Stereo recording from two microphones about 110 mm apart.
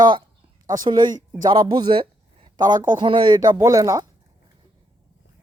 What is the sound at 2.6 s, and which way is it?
Speech, 40° right (ahead or behind).